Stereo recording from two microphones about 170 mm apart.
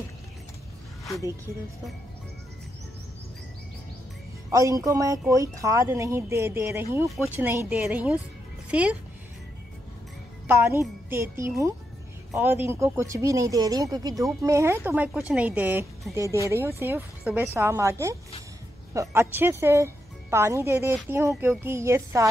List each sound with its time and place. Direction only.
4.5 s speech: 20° right (ahead or behind)
10.4 s speech: 15° right (ahead or behind)